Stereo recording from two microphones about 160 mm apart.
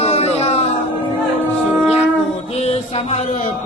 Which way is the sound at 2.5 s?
40° left (ahead or behind).